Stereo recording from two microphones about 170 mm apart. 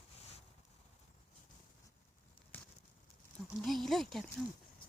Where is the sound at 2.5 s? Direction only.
10° left (ahead or behind).